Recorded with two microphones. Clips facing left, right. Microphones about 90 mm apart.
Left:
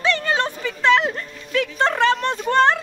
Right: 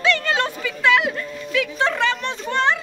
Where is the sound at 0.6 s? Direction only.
35° left (ahead or behind).